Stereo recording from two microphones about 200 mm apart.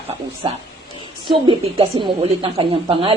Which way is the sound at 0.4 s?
25° right (ahead or behind).